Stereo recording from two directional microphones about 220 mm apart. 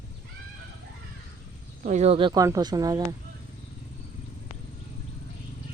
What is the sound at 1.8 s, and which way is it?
Speech, 30° right (ahead or behind).